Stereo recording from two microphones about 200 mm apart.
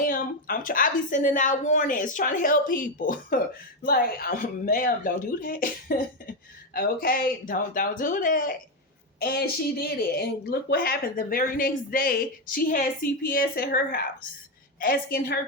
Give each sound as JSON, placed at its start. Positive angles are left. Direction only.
{"t": 0.0, "sound": "speech", "side_deg": 45}